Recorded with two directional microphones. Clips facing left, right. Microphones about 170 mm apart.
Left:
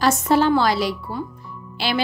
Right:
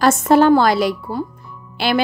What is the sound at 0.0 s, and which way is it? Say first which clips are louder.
A woman's voice: right 5 dB; 50° right (ahead or behind).